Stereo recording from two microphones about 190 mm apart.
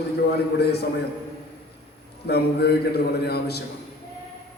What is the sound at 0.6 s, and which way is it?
Speech, 60° left (ahead or behind).